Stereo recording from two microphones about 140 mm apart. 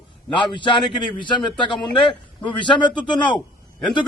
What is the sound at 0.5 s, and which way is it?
A man's voice, 35° left (ahead or behind).